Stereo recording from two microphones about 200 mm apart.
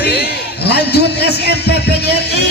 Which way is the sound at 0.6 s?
55° left (ahead or behind).